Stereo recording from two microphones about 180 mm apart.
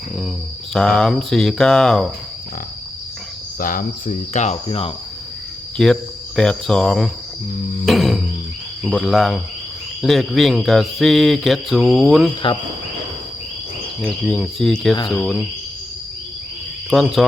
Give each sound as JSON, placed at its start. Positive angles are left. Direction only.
{"t": 0.7, "sound": "speech", "side_deg": 5}
{"t": 3.6, "sound": "cricket", "side_deg": 50}
{"t": 5.7, "sound": "cricket", "side_deg": 5}
{"t": 7.9, "sound": "music", "side_deg": 0}
{"t": 8.8, "sound": "speech", "side_deg": 0}
{"t": 14.0, "sound": "speech", "side_deg": 0}
{"t": 16.9, "sound": "speech", "side_deg": 0}